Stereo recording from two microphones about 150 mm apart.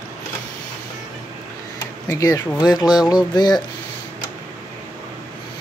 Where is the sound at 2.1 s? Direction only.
25° left (ahead or behind).